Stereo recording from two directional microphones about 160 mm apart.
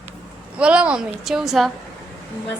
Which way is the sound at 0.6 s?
5° right (ahead or behind).